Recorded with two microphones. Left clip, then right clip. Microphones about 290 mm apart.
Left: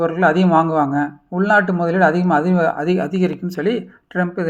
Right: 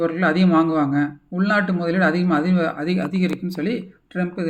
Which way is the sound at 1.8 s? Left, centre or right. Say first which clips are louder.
Left 5 dB; centre.